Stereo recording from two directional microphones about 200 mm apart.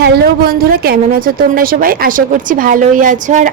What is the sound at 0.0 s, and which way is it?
A woman's voice, 50° right (ahead or behind).